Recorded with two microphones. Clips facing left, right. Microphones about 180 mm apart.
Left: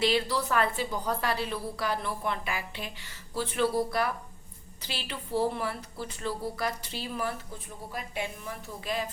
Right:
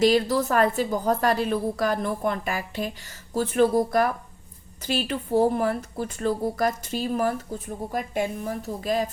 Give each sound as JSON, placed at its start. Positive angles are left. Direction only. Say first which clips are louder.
{"t": 0.0, "sound": "a woman's voice", "louder": "right 7 dB", "side_deg": -45}